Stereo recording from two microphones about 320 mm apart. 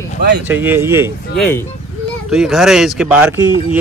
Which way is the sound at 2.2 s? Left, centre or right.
Centre.